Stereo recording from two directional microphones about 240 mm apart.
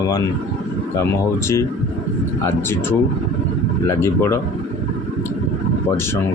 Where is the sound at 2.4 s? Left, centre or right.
Centre.